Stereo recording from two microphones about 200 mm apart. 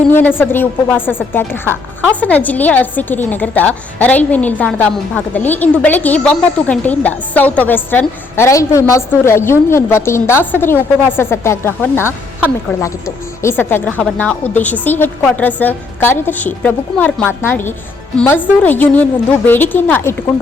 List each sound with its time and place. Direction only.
0.1 s a woman's voice: 10° left (ahead or behind)